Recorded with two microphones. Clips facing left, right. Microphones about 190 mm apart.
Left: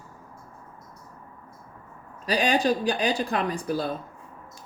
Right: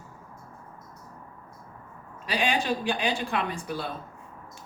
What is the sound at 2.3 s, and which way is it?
Speech, 40° left (ahead or behind).